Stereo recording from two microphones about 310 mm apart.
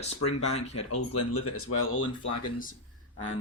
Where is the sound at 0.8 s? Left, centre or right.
Left.